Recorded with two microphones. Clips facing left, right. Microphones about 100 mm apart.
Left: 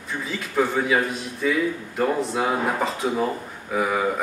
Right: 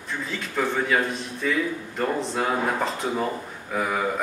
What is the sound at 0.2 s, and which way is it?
Speech, 5° left (ahead or behind).